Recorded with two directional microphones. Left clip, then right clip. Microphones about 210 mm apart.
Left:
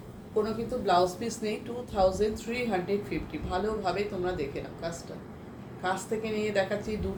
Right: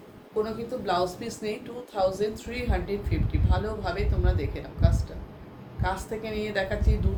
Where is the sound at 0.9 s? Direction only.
20° right (ahead or behind).